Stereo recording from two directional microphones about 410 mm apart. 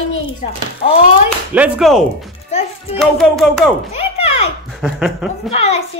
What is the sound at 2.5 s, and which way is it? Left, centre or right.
Music, centre.